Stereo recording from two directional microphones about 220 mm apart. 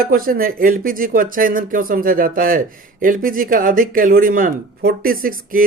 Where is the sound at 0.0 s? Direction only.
40° right (ahead or behind).